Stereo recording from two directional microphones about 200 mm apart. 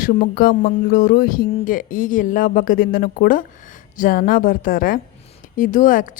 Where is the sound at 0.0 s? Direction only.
40° left (ahead or behind).